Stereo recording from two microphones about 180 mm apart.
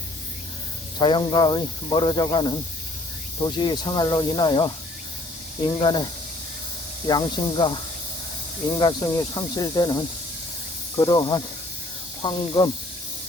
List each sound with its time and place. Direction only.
0.9 s speech: 25° left (ahead or behind)
7.1 s speech: 25° left (ahead or behind)
8.8 s speech: 20° left (ahead or behind)